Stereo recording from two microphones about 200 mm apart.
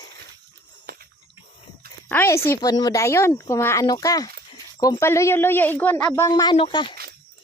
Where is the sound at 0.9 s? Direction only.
50° right (ahead or behind).